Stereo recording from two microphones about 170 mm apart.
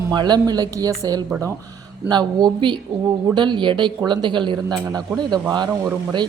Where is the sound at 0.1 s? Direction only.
25° right (ahead or behind).